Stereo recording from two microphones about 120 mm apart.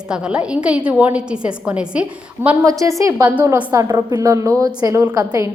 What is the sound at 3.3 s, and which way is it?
Speech, 15° right (ahead or behind).